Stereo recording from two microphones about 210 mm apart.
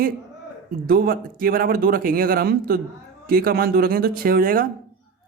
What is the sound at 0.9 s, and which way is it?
Speech, 45° right (ahead or behind).